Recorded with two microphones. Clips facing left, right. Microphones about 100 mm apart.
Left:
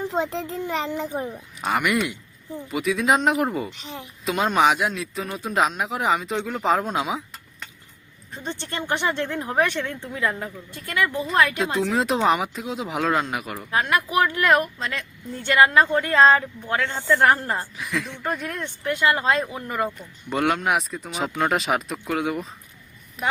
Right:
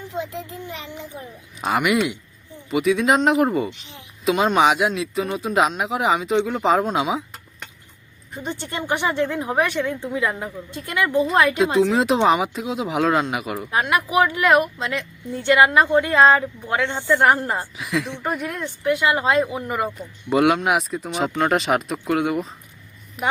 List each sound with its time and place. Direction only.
0.0 s a child's voice: 90° left
1.1 s a child's voice: 45° left (ahead or behind)
1.6 s speech: 5° right (ahead or behind)
8.3 s speech: 15° right (ahead or behind)
11.5 s speech: centre (ahead or behind)
13.6 s speech: 20° right (ahead or behind)
17.7 s speech: centre (ahead or behind)
18.1 s speech: 15° right (ahead or behind)
20.3 s speech: 5° right (ahead or behind)